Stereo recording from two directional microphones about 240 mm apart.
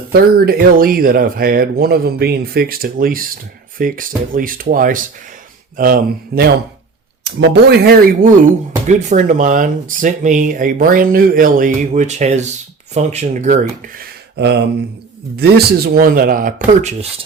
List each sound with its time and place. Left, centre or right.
0.1 s speech: right
7.5 s speech: right